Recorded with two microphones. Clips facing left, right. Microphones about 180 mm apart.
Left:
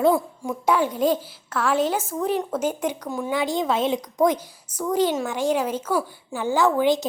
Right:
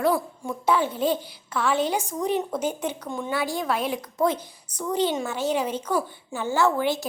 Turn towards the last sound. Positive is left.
turn(degrees=15)  # may be behind; listen again after turning